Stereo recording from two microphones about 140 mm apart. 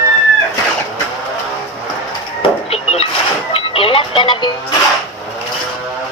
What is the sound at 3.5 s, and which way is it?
Music, 40° left (ahead or behind).